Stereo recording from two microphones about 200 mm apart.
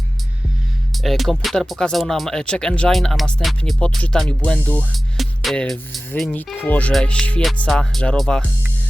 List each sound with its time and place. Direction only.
0.9 s speech: centre (ahead or behind)